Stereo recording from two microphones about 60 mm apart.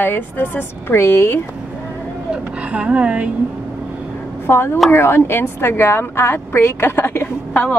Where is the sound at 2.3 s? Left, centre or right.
Right.